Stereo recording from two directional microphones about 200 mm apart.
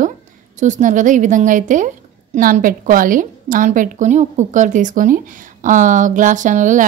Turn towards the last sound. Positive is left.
turn(degrees=-40)  # may be behind; listen again after turning